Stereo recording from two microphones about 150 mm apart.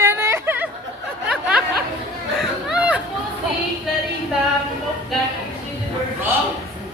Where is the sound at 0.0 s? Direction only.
15° right (ahead or behind).